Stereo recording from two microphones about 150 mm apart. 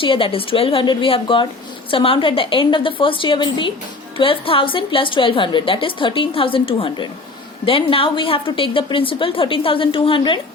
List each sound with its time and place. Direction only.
0.0 s a woman's voice: 35° left (ahead or behind)